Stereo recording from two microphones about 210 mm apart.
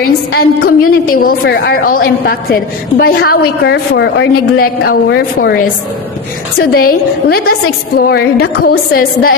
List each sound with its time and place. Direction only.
0.0 s a woman's voice: 45° left (ahead or behind)
6.6 s a woman's voice: 45° left (ahead or behind)